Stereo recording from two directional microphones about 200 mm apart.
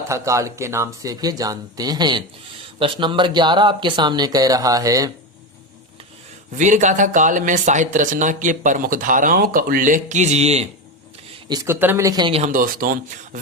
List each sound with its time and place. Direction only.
0.1 s speech: 15° right (ahead or behind)
6.6 s speech: 35° right (ahead or behind)
11.4 s speech: 15° right (ahead or behind)
12.5 s speech: 45° right (ahead or behind)